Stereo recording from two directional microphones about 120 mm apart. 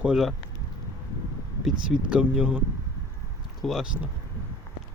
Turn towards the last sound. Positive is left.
turn(degrees=0)  # may be behind; listen again after turning